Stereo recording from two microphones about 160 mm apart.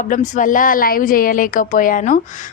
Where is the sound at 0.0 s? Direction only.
55° left (ahead or behind).